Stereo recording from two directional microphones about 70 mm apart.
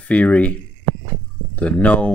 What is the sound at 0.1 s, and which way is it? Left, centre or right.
Speech, centre.